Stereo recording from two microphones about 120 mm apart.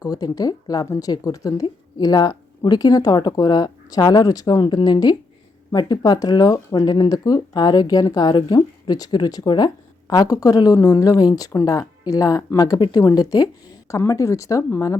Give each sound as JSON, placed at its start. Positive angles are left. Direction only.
{"t": 0.0, "sound": "speech", "side_deg": 30}